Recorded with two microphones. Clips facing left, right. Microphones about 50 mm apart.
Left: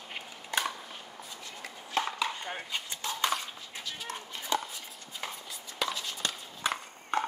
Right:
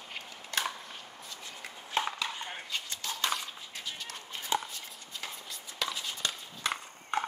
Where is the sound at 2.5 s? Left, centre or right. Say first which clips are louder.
Left 1 dB; centre.